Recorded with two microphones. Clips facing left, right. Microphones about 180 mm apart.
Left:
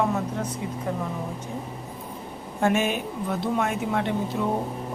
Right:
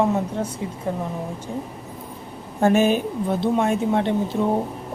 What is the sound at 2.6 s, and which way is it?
A woman's voice, 35° right (ahead or behind).